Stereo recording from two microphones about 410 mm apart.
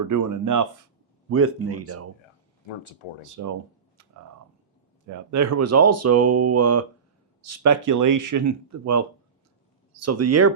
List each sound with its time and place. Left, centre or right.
0.1 s speech: right
1.3 s speech: right
3.2 s speech: right
5.0 s speech: right